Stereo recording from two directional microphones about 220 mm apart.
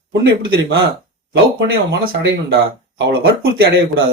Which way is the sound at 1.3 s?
55° right (ahead or behind).